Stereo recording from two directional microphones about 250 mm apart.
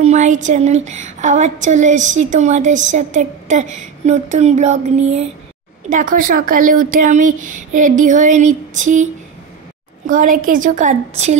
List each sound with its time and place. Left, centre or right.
0.0 s a woman's voice: right